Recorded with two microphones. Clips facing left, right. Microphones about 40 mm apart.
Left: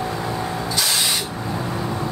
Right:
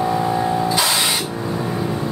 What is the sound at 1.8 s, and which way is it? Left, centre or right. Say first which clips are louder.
Vehicle: right 2 dB; centre.